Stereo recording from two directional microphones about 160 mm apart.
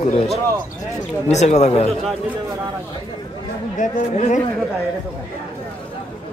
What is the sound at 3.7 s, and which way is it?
Speech, 50° left (ahead or behind).